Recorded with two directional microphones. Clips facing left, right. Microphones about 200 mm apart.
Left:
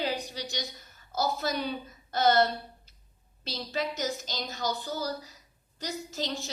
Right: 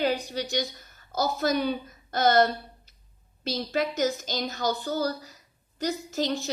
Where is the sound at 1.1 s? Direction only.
45° right (ahead or behind).